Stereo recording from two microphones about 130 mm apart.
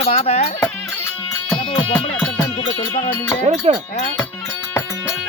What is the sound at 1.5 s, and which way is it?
Music, 40° left (ahead or behind).